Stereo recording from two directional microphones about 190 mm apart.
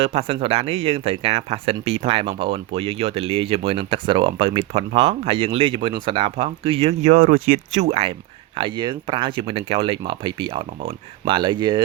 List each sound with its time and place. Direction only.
0.0 s speech: 30° right (ahead or behind)